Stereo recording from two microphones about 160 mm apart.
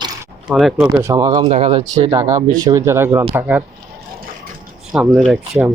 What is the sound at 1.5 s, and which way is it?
Speech, 40° right (ahead or behind).